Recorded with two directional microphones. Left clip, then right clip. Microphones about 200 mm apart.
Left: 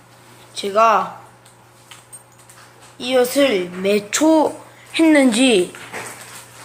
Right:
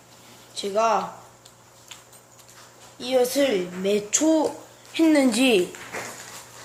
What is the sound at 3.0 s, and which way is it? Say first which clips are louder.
A woman's voice: left 5 dB; centre (ahead or behind).